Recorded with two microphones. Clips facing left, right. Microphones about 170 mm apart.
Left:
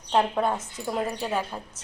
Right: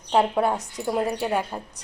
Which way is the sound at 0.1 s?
10° right (ahead or behind).